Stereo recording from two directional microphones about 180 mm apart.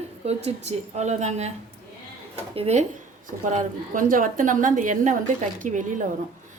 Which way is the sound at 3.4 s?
45° right (ahead or behind).